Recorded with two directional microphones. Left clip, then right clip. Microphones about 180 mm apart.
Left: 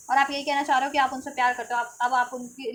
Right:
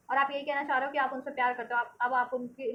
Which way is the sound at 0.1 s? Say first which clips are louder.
Left 6 dB; 35° left (ahead or behind).